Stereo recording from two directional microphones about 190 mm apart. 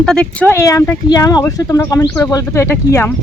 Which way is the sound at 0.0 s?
5° left (ahead or behind).